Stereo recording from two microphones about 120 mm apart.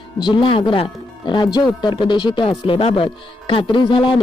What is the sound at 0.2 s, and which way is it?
Speech, 40° left (ahead or behind).